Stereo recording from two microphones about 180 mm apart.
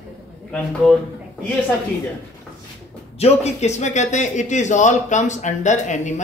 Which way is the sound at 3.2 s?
35° left (ahead or behind).